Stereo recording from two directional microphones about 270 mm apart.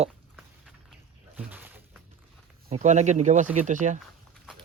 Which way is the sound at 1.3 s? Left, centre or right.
Centre.